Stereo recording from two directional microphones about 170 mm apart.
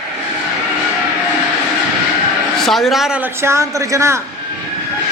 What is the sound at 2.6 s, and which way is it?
Speech, centre (ahead or behind).